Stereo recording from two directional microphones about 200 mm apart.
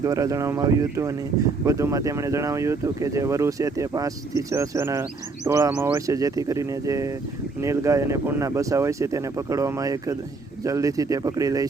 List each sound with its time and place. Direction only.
0.0 s speech: 15° right (ahead or behind)